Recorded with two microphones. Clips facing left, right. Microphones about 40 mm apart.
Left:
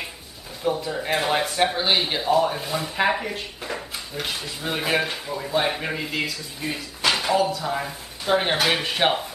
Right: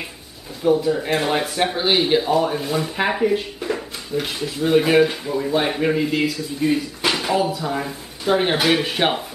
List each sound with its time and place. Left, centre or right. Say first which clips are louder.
0.7 s speech: right 6 dB; centre